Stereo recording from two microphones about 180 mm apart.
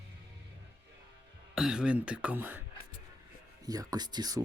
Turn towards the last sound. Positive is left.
turn(degrees=-20)  # may be behind; listen again after turning